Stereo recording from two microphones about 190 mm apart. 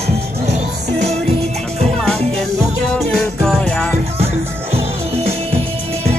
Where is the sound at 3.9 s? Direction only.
30° right (ahead or behind).